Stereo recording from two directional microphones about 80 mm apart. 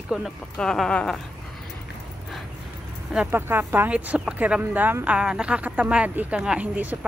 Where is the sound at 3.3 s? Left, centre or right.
Right.